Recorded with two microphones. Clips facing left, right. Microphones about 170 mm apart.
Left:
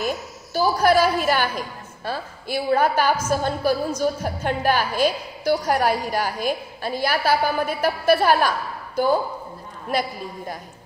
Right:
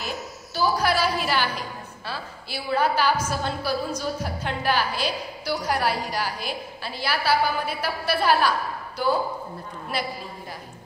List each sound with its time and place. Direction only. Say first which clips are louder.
0.0 s a woman's voice: left 6 dB; 45° left (ahead or behind)